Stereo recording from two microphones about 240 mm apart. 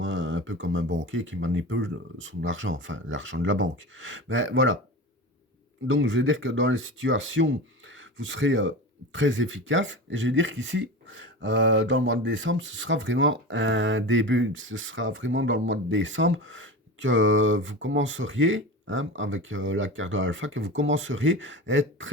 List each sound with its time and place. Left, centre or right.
0.0 s speech: right
5.9 s speech: right